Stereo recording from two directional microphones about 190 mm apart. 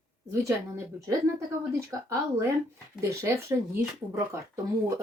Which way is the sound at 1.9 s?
15° right (ahead or behind).